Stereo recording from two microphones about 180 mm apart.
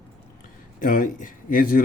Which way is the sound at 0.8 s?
50° left (ahead or behind).